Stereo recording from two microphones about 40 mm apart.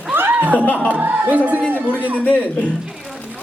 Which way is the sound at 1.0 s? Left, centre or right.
Right.